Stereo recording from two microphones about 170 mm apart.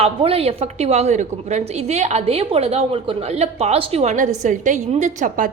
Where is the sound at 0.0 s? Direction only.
35° right (ahead or behind).